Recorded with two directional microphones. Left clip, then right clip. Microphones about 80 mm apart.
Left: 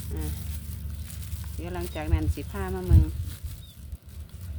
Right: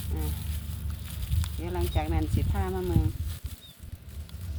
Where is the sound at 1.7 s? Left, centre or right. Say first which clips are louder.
Right 2 dB; left.